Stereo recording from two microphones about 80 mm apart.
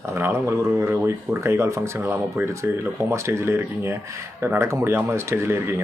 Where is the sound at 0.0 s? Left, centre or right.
Right.